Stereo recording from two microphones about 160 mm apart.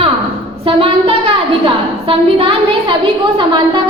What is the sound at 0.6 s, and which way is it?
A woman's voice, 35° right (ahead or behind).